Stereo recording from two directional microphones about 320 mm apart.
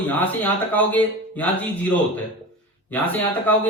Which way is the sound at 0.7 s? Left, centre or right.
Centre.